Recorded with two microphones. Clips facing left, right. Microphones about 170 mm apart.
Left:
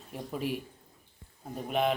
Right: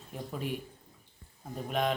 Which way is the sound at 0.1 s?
5° left (ahead or behind).